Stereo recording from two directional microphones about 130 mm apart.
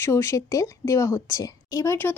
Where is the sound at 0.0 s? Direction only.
20° left (ahead or behind).